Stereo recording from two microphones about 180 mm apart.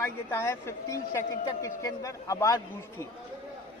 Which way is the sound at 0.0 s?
15° left (ahead or behind).